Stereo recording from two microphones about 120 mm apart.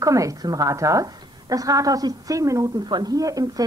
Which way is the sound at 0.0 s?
25° right (ahead or behind).